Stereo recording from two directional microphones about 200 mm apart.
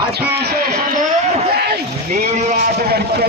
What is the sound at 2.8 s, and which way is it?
Speech, 50° right (ahead or behind).